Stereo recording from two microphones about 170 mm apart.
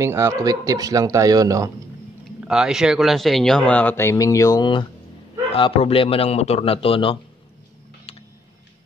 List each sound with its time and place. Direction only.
0.0 s speech: 15° right (ahead or behind)
2.4 s a man's voice: 5° right (ahead or behind); by 7.2 s 30° left (ahead or behind)